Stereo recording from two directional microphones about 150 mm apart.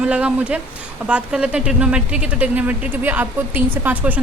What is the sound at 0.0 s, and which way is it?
Speech, 10° right (ahead or behind).